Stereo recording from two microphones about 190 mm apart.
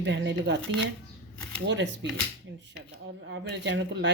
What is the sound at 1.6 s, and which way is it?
Speech, 70° right (ahead or behind).